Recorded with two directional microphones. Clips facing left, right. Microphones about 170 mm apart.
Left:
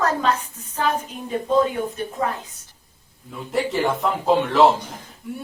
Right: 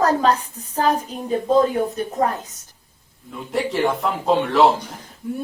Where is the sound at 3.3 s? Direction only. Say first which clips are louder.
Even; centre (ahead or behind).